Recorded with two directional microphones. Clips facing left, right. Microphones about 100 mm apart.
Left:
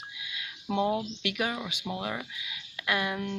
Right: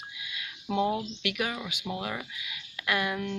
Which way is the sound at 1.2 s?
30° left (ahead or behind).